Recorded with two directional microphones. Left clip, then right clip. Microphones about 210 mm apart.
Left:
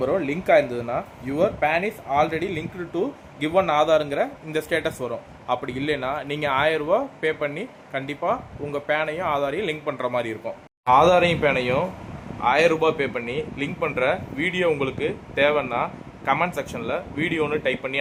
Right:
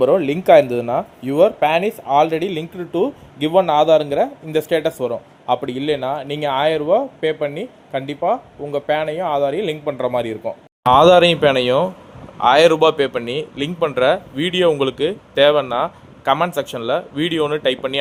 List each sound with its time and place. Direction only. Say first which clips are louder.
0.0 s a man's voice: right 8 dB; 35° right (ahead or behind)